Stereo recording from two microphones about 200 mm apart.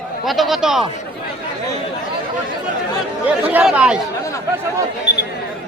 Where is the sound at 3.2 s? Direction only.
5° right (ahead or behind).